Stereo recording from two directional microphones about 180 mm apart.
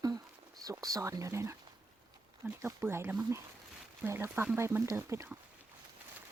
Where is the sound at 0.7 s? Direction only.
20° right (ahead or behind).